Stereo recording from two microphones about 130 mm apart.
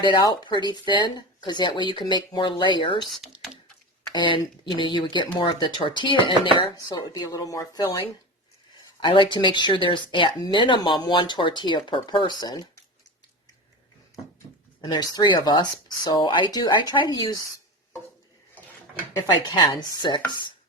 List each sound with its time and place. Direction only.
0.0 s speech: 30° left (ahead or behind)
3.0 s speech: centre (ahead or behind)
4.1 s speech: 35° left (ahead or behind)
7.1 s speech: 25° left (ahead or behind)
9.0 s speech: 40° left (ahead or behind)
14.8 s speech: 30° left (ahead or behind)
19.5 s speech: 35° left (ahead or behind)